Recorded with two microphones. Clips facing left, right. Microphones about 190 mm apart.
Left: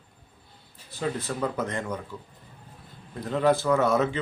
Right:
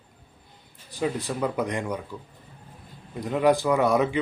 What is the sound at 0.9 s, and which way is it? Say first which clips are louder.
Speech: right 2 dB; 15° right (ahead or behind).